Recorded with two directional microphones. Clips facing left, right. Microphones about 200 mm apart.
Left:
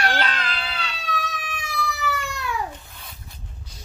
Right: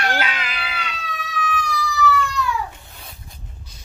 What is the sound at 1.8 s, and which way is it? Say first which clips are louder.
Cat: right 6 dB; 60° left (ahead or behind).